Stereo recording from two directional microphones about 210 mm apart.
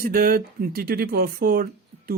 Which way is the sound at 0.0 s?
45° right (ahead or behind).